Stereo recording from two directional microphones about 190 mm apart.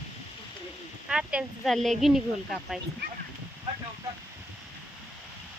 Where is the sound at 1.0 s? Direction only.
5° right (ahead or behind).